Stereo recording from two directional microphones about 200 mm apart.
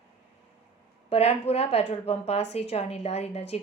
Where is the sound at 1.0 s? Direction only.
30° left (ahead or behind).